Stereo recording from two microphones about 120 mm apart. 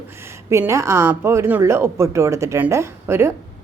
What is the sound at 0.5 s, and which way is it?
A woman's voice, 25° right (ahead or behind).